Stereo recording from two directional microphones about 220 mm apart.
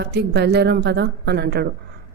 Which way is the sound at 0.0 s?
50° right (ahead or behind).